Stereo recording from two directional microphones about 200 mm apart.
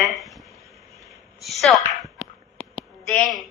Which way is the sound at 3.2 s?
Centre (ahead or behind).